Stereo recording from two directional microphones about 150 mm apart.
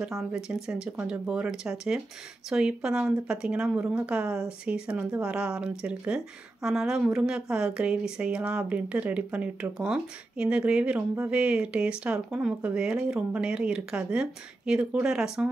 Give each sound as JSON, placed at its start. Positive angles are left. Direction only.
{"t": 0.0, "sound": "speech", "side_deg": -5}